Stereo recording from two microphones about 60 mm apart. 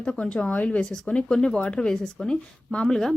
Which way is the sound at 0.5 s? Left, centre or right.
Left.